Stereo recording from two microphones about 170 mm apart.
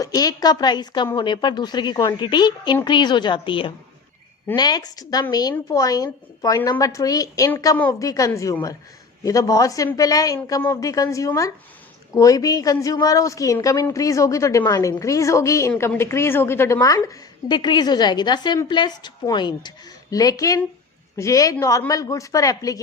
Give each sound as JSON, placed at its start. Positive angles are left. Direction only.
{"t": 0.0, "sound": "a woman's voice", "side_deg": 20}